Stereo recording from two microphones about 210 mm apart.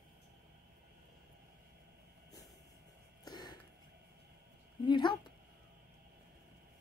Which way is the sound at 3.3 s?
20° left (ahead or behind).